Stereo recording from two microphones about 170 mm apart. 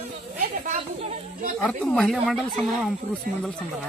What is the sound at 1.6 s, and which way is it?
Speech, 5° left (ahead or behind).